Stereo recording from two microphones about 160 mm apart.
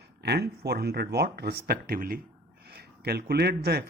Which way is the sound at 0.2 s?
90° right.